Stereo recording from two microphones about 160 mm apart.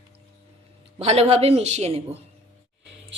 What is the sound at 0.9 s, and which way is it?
A man's voice, 40° right (ahead or behind).